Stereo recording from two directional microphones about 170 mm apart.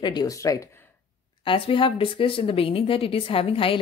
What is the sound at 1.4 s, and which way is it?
Speech, 30° left (ahead or behind).